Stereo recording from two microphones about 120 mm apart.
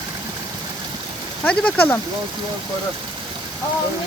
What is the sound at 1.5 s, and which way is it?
Speech, 10° left (ahead or behind).